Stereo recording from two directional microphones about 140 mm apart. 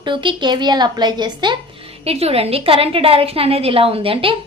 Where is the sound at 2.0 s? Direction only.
45° right (ahead or behind).